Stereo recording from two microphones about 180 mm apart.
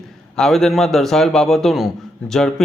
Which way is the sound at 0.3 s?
Centre (ahead or behind).